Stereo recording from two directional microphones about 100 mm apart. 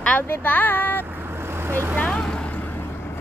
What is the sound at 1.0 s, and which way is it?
Vehicle, 20° right (ahead or behind).